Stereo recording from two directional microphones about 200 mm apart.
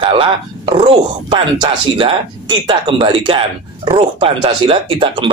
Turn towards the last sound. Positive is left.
turn(degrees=-25)  # may be behind; listen again after turning